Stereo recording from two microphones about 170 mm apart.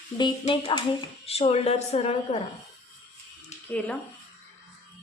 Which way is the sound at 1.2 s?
35° left (ahead or behind).